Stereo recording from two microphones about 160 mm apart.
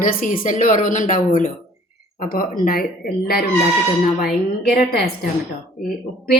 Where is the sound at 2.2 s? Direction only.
65° left (ahead or behind).